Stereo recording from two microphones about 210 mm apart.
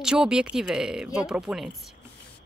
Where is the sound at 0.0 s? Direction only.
5° right (ahead or behind).